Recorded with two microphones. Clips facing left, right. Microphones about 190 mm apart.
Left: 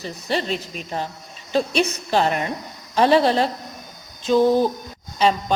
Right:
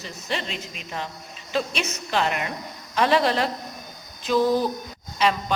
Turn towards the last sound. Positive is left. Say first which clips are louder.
# left 3 dB
turn(degrees=30)  # may be behind; listen again after turning